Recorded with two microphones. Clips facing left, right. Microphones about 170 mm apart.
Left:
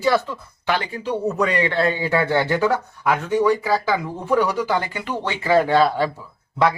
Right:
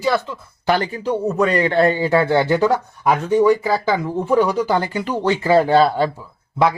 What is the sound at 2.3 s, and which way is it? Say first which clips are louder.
Speech: right 4 dB; 10° right (ahead or behind).